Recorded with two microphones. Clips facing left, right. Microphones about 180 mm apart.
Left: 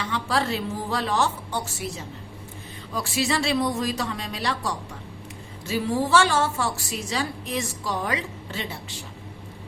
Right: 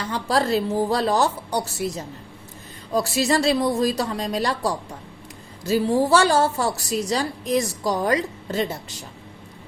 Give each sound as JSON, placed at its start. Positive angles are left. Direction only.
{"t": 0.0, "sound": "a woman's voice", "side_deg": -40}